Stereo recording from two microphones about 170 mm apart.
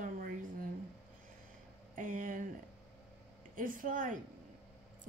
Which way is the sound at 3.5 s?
55° right (ahead or behind).